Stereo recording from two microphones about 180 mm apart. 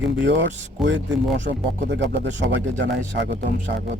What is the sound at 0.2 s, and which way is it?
Speech, 80° right.